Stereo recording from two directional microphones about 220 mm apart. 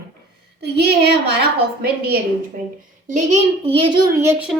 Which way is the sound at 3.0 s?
35° right (ahead or behind).